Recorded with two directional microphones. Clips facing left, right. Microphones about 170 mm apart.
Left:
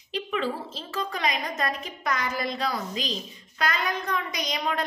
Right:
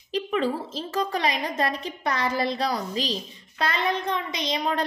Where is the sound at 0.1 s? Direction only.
40° right (ahead or behind).